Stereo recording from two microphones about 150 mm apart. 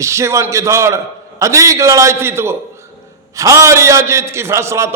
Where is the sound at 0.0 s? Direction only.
20° right (ahead or behind).